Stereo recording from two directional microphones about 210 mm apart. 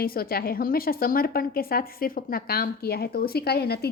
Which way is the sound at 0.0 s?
45° left (ahead or behind).